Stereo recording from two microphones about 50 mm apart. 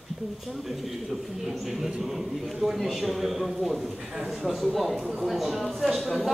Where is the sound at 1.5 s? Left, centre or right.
Centre.